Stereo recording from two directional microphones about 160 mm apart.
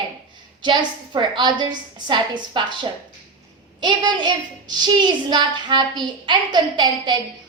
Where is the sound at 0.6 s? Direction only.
30° right (ahead or behind).